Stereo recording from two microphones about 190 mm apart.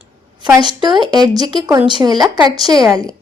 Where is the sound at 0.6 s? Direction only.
25° right (ahead or behind).